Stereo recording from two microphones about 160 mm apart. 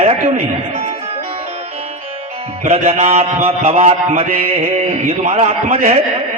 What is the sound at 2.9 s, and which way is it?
A man's voice, 40° right (ahead or behind).